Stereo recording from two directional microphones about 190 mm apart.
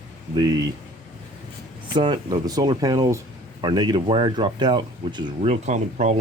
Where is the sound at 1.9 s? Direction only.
25° right (ahead or behind).